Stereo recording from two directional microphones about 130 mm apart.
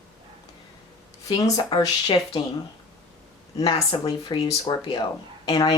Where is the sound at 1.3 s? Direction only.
25° left (ahead or behind).